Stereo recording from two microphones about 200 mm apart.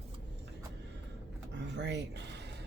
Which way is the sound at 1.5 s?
60° right (ahead or behind).